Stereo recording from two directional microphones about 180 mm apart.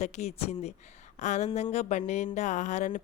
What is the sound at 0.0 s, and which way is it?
A woman's voice, 40° left (ahead or behind).